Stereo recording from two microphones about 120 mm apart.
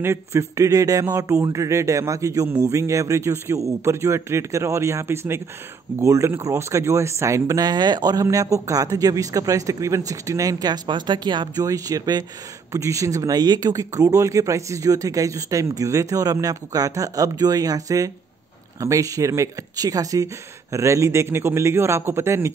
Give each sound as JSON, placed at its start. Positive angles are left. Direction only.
{"t": 0.0, "sound": "speech", "side_deg": -20}